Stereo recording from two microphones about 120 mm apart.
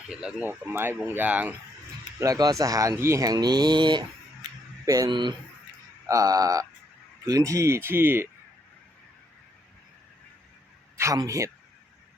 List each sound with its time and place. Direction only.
0.1 s speech: 5° right (ahead or behind)
2.1 s speech: 30° right (ahead or behind)
10.9 s a man's voice: 25° right (ahead or behind)